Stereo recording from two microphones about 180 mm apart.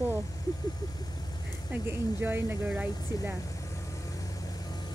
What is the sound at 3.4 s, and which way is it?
Vehicle, 20° left (ahead or behind).